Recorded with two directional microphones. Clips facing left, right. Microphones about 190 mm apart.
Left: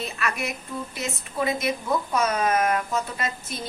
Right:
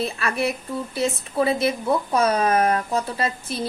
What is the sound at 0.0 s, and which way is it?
A woman's voice, 30° right (ahead or behind).